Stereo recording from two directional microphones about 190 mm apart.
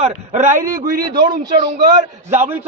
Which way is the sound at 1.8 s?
45° right (ahead or behind).